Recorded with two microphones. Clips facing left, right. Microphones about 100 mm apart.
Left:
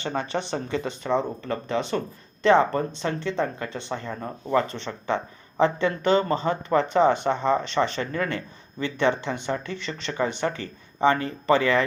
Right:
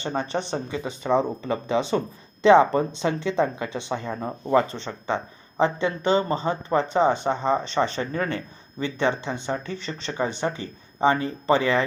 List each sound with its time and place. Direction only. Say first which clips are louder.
0.2 s speech: right 1 dB; 30° right (ahead or behind)
0.7 s speech: right 2 dB; 5° right (ahead or behind)
5.0 s speech: left 1 dB; 25° right (ahead or behind)
9.7 s speech: even; 40° right (ahead or behind)